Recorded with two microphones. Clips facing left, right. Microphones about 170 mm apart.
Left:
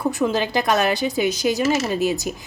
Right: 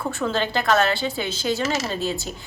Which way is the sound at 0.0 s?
15° left (ahead or behind).